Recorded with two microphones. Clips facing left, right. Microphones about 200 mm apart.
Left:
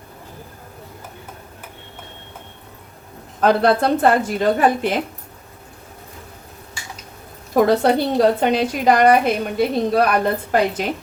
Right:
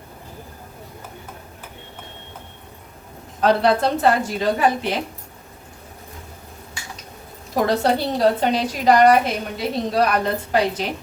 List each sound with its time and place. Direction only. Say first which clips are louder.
3.4 s a woman's voice: left 2 dB; 55° left (ahead or behind)
7.5 s a woman's voice: left 4 dB; 55° left (ahead or behind)